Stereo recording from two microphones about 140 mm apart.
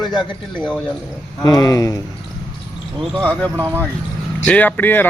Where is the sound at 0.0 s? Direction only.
35° left (ahead or behind).